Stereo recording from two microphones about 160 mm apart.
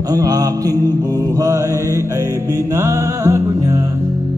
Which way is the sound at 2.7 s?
15° right (ahead or behind).